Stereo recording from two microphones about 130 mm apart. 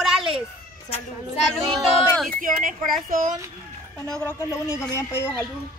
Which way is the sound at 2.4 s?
90° right.